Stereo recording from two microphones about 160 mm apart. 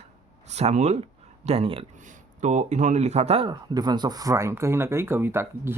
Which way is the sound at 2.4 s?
45° right (ahead or behind).